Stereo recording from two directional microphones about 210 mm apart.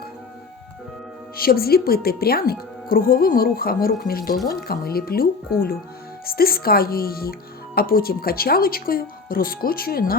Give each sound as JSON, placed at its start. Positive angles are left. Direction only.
{"t": 1.4, "sound": "a woman's voice", "side_deg": 45}